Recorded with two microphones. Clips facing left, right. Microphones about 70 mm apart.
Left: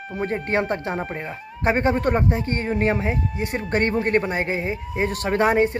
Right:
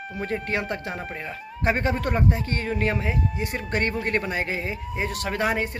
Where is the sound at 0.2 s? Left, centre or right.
Left.